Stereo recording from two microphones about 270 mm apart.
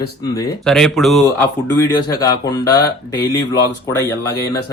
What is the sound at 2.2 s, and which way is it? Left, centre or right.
Speech, centre.